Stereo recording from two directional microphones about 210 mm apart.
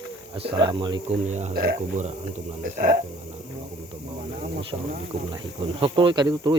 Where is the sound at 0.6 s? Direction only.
20° right (ahead or behind).